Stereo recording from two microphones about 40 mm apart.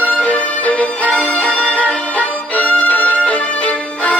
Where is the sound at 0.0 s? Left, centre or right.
Left.